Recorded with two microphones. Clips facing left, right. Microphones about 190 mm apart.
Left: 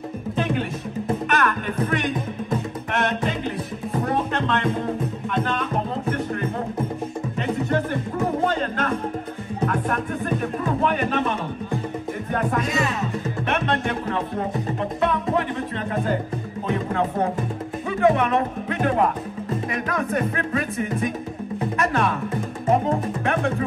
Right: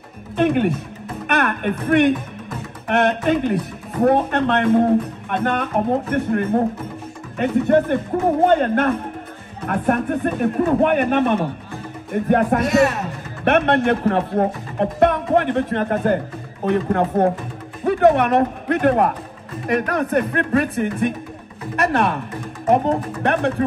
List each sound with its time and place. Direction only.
0.4 s speech: 60° right (ahead or behind)
1.2 s music: 60° right (ahead or behind)
2.9 s speech: 60° right (ahead or behind)